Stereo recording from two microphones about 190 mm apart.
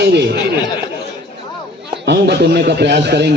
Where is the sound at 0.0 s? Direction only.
60° right (ahead or behind).